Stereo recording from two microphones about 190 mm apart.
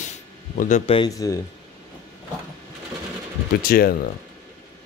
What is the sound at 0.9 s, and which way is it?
Speech, 20° left (ahead or behind).